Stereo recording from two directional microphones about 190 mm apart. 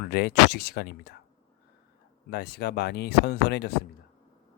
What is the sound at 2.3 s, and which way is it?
Speech, 55° left (ahead or behind).